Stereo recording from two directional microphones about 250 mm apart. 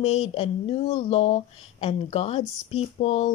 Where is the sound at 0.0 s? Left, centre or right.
Left.